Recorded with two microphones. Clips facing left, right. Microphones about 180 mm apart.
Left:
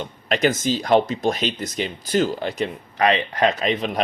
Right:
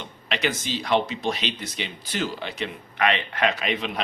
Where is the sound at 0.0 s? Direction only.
45° left (ahead or behind).